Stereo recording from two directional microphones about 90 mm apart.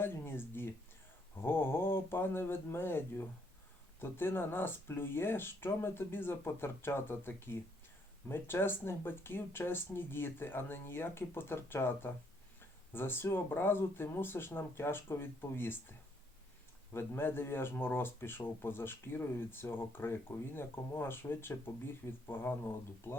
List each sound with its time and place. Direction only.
0.0 s speech: 25° left (ahead or behind)